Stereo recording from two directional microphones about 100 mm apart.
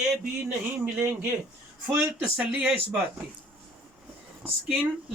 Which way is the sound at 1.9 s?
25° right (ahead or behind).